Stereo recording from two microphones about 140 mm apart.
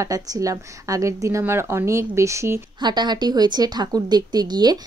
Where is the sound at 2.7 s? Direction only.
30° right (ahead or behind).